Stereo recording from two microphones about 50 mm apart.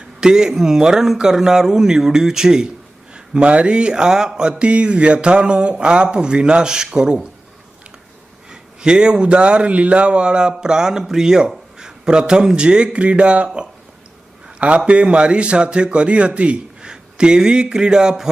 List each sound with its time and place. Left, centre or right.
0.2 s a man's voice: centre
3.3 s speech: right
8.4 s a man's voice: centre
14.8 s speech: right